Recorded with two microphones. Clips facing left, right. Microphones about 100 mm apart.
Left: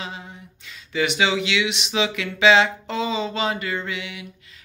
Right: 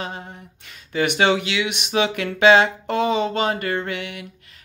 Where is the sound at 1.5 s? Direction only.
40° right (ahead or behind).